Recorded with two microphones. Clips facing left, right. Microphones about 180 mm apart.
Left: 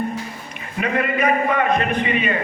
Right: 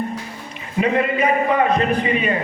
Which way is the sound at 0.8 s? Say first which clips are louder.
Right 3 dB; 25° right (ahead or behind).